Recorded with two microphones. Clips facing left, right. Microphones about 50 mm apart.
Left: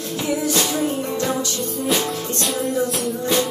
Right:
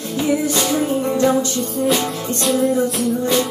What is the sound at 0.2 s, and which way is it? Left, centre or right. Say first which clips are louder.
Music: right 3 dB; centre.